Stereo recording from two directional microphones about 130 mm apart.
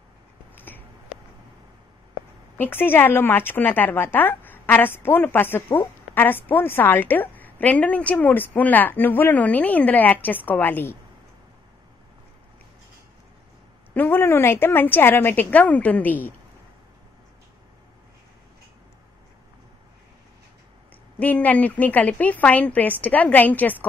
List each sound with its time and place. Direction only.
0.6 s finger snapping: 15° left (ahead or behind)
2.5 s a woman's voice: 15° left (ahead or behind)
13.9 s a woman's voice: 15° left (ahead or behind)
21.2 s a woman's voice: 10° left (ahead or behind)